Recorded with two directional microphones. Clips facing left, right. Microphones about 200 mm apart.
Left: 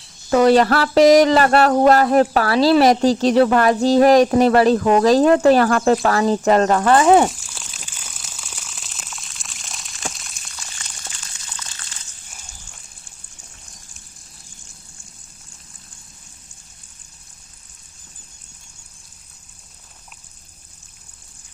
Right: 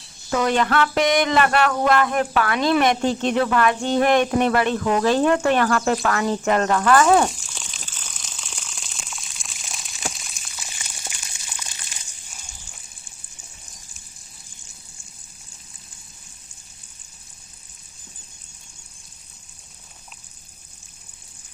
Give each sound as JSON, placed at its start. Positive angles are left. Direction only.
{"t": 0.3, "sound": "speech", "side_deg": 35}
{"t": 7.3, "sound": "crumpling", "side_deg": 0}